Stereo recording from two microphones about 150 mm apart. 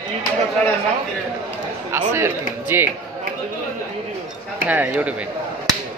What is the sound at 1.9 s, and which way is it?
Speech, 15° right (ahead or behind).